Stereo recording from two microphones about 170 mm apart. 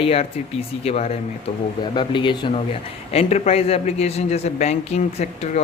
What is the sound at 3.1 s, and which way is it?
A man's voice, 40° left (ahead or behind).